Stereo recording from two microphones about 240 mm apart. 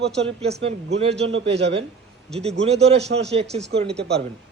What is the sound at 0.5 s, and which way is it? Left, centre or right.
Speech, right.